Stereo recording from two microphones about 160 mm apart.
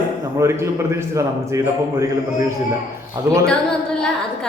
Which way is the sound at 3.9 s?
5° left (ahead or behind).